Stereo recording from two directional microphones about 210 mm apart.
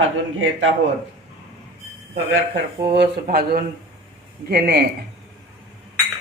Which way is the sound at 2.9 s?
50° right (ahead or behind).